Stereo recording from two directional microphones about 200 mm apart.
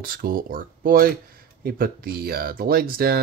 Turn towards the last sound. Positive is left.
turn(degrees=-50)  # may be behind; listen again after turning